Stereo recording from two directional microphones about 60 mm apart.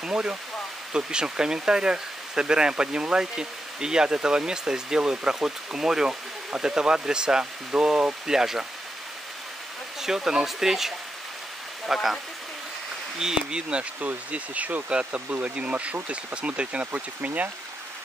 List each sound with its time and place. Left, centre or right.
0.0 s speech: centre
10.0 s speech: centre
13.2 s speech: centre